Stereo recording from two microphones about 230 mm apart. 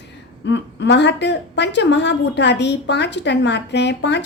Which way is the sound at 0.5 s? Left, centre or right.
Left.